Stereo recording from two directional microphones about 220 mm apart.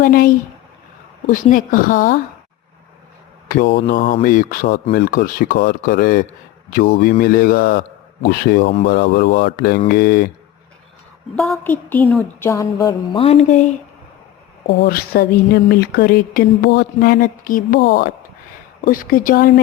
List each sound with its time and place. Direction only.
0.0 s speech: 40° left (ahead or behind)
1.3 s speech: 35° left (ahead or behind)
3.5 s speech: 40° left (ahead or behind)
11.3 s speech: centre (ahead or behind); by 13.7 s 30° left (ahead or behind)
14.7 s speech: 45° left (ahead or behind)